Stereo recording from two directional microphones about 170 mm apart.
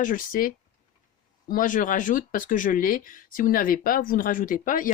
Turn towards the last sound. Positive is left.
turn(degrees=50)  # may be behind; listen again after turning